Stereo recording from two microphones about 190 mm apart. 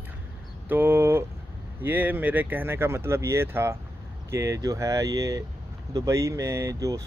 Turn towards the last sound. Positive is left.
turn(degrees=-15)  # may be behind; listen again after turning